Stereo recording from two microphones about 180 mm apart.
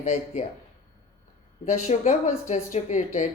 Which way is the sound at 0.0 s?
40° left (ahead or behind).